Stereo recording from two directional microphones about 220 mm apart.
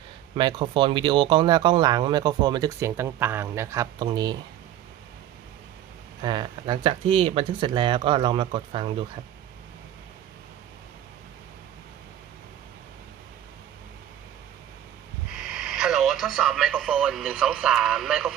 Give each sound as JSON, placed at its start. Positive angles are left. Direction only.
{"t": 0.3, "sound": "speech", "side_deg": -20}
{"t": 6.2, "sound": "speech", "side_deg": -20}
{"t": 15.4, "sound": "radio", "side_deg": -5}